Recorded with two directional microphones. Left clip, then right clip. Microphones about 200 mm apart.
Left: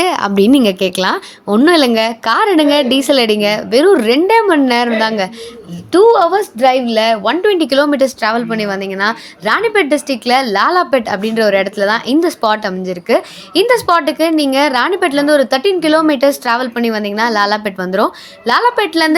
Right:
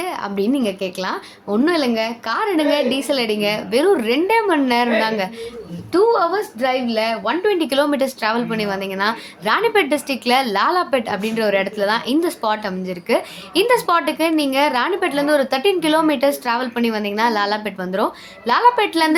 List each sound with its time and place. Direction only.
0.0 s a woman's voice: 45° left (ahead or behind); by 19.1 s 25° left (ahead or behind)